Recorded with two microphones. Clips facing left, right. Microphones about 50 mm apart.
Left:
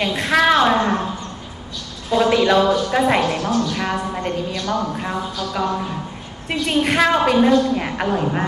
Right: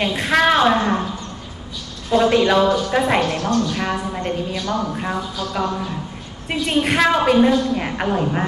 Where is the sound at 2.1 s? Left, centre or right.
Centre.